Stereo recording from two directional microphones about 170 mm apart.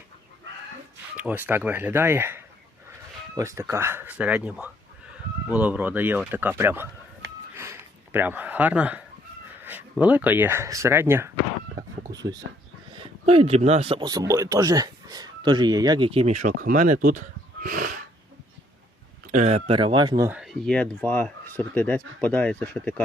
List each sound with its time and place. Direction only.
1.1 s speech: 10° right (ahead or behind)
7.5 s a sound: 15° right (ahead or behind)
9.6 s speech: 10° right (ahead or behind); by 18.0 s 55° right (ahead or behind)
19.3 s speech: 40° right (ahead or behind); by 20.3 s 20° right (ahead or behind)
20.3 s speech: centre (ahead or behind)